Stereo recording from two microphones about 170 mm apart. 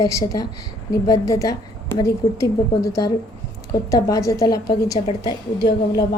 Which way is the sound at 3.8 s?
20° left (ahead or behind).